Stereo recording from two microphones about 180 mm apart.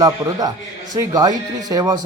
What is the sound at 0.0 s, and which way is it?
A man's voice, 20° right (ahead or behind).